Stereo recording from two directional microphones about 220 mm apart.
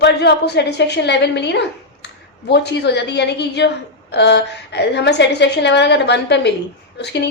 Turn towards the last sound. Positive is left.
turn(degrees=50)  # may be behind; listen again after turning